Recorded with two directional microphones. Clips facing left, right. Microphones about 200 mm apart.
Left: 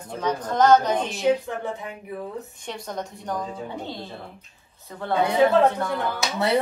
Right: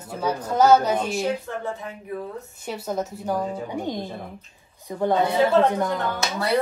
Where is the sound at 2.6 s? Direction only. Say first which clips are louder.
Right 8 dB; 5° right (ahead or behind).